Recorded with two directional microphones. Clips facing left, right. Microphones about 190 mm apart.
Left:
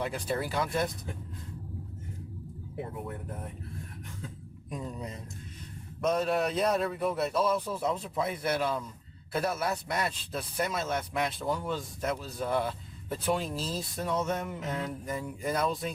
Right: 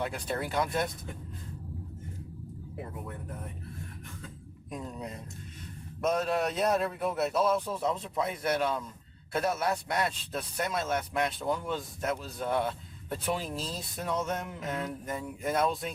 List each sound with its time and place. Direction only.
0.0 s speech: centre (ahead or behind)
4.7 s speech: centre (ahead or behind)